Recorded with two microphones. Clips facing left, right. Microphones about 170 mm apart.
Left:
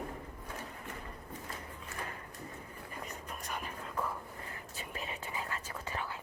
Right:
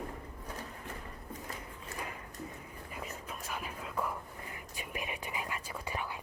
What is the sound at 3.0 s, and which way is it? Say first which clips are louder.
Whispering: right 2 dB; centre (ahead or behind).